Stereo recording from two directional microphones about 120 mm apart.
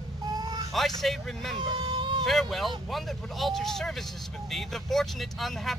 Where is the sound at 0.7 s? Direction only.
Centre (ahead or behind).